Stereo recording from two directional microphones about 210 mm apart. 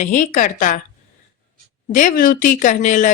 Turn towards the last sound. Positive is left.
turn(degrees=35)  # may be behind; listen again after turning